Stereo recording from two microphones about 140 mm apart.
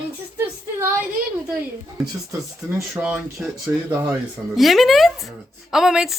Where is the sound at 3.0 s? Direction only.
10° right (ahead or behind).